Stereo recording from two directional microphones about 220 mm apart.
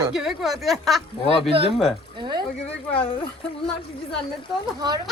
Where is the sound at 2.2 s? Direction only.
20° right (ahead or behind).